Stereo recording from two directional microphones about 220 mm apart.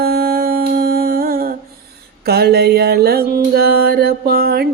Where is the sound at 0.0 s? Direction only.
45° right (ahead or behind).